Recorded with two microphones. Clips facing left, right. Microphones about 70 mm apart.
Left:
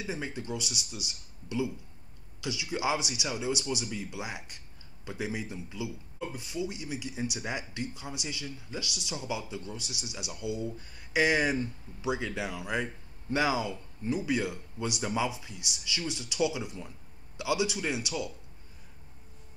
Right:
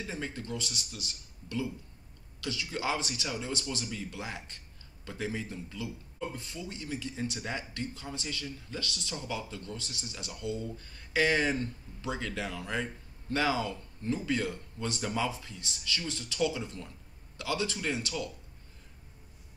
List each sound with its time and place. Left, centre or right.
0.0 s a man's voice: centre